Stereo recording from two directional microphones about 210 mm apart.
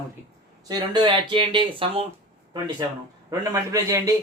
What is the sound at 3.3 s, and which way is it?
Speech, 15° right (ahead or behind).